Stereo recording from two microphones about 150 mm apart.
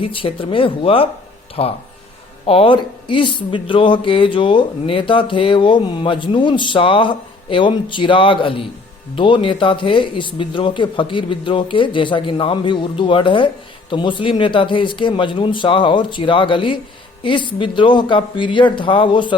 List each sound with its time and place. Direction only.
0.0 s speech: 35° left (ahead or behind)